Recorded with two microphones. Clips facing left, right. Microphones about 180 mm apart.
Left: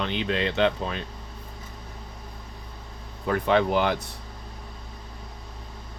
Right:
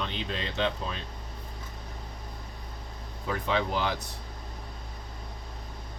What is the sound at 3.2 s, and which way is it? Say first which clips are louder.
Speech: left 7 dB; 60° left (ahead or behind).